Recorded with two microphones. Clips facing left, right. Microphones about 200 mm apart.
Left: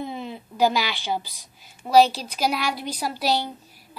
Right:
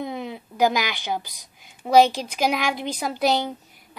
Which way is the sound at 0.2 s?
15° right (ahead or behind).